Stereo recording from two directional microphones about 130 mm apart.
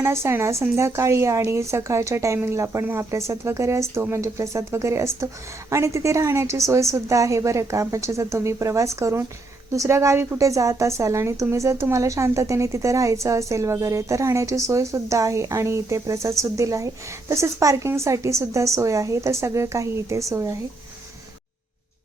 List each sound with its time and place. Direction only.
0.0 s a woman's voice: 20° right (ahead or behind)